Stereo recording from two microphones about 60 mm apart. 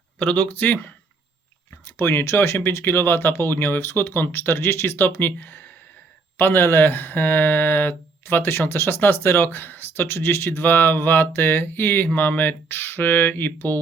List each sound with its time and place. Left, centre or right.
0.2 s speech: left
2.0 s speech: left
2.6 s speech: left